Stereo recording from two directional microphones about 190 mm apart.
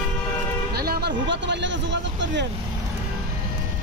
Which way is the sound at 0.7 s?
55° right (ahead or behind).